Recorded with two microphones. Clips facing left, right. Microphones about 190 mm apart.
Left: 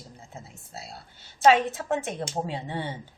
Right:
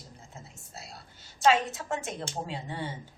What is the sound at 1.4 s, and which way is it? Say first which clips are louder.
Speech: left 4 dB; 60° left (ahead or behind).